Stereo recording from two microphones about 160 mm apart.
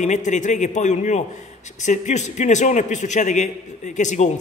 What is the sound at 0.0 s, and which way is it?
A man's voice, 50° left (ahead or behind).